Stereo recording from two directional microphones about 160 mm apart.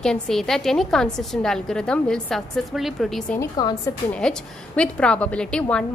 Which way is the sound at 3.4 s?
25° left (ahead or behind).